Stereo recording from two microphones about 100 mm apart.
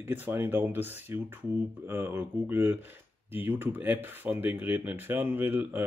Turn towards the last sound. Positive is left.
turn(degrees=-20)  # may be behind; listen again after turning